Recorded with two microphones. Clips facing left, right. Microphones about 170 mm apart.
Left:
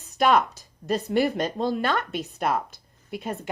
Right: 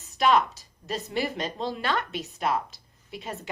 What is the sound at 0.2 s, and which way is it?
Speech, 50° left (ahead or behind).